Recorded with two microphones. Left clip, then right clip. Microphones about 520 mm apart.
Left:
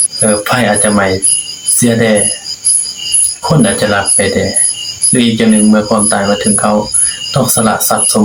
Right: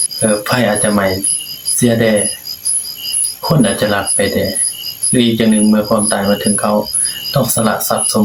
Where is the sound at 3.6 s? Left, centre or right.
Right.